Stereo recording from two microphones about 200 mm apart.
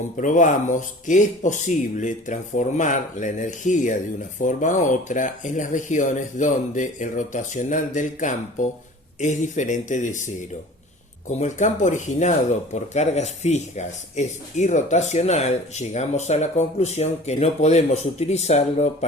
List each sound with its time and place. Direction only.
0.2 s speech: 40° left (ahead or behind)